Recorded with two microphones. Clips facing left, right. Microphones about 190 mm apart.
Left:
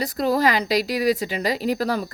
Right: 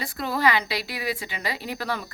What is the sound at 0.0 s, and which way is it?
Speech, 40° left (ahead or behind).